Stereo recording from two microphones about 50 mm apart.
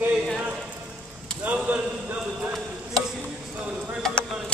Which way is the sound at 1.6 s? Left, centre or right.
Right.